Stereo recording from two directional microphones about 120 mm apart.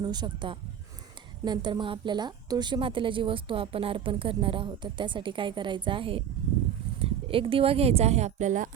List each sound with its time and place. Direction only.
0.0 s a woman's voice: 35° right (ahead or behind); by 8.7 s 90° right